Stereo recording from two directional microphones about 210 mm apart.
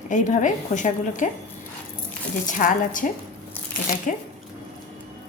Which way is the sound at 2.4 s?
40° left (ahead or behind).